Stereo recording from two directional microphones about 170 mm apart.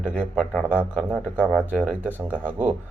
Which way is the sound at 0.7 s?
10° right (ahead or behind).